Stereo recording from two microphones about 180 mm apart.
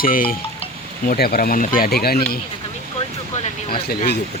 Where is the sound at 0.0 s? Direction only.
50° left (ahead or behind).